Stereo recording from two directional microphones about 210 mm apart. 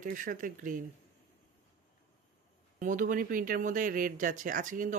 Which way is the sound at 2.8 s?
40° right (ahead or behind).